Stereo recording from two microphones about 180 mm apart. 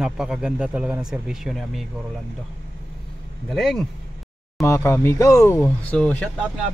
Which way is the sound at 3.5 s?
Centre (ahead or behind).